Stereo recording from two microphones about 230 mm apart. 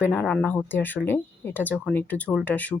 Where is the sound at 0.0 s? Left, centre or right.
Centre.